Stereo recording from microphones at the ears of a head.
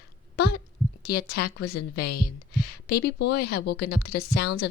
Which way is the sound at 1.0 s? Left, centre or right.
Left.